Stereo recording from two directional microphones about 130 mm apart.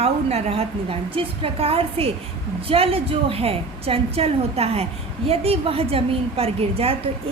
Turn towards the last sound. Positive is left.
turn(degrees=-50)  # may be behind; listen again after turning